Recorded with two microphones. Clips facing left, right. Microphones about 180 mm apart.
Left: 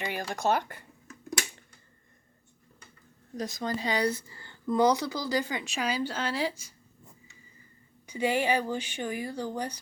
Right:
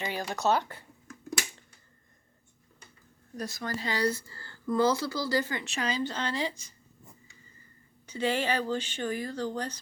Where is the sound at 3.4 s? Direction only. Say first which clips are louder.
Left 3 dB; 20° left (ahead or behind).